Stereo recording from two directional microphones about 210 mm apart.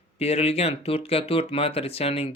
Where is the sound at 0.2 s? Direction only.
30° left (ahead or behind).